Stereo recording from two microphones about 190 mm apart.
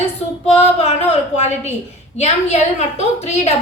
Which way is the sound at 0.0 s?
35° left (ahead or behind).